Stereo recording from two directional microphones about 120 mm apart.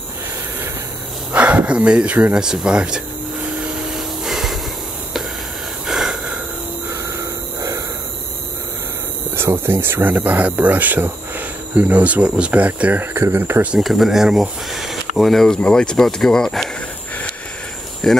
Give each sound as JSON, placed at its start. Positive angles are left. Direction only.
{"t": 1.3, "sound": "speech", "side_deg": -10}
{"t": 3.6, "sound": "vacuum cleaner", "side_deg": -5}
{"t": 5.9, "sound": "a sound", "side_deg": -5}
{"t": 6.9, "sound": "a sound", "side_deg": -25}
{"t": 9.4, "sound": "speech", "side_deg": -20}
{"t": 13.7, "sound": "speech", "side_deg": 0}
{"t": 18.0, "sound": "speech", "side_deg": 5}